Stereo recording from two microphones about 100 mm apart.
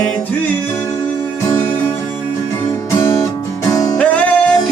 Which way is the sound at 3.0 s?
30° left (ahead or behind).